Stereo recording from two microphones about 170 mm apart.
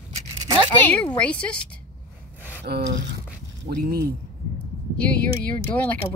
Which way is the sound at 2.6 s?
70° right (ahead or behind).